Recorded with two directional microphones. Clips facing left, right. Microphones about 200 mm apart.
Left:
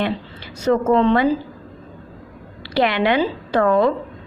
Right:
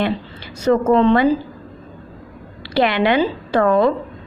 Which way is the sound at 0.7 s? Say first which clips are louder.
Right 2 dB; 40° right (ahead or behind).